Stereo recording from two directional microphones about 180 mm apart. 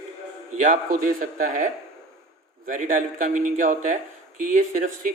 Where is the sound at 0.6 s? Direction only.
45° right (ahead or behind).